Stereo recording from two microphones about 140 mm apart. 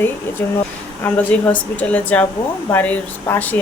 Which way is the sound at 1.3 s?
10° left (ahead or behind).